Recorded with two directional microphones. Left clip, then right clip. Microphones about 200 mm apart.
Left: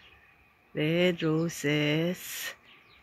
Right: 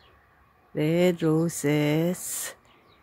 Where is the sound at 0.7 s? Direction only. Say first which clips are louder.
Right 3 dB; 10° right (ahead or behind).